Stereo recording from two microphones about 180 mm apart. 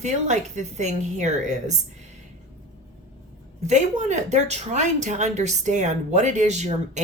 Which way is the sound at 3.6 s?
40° right (ahead or behind).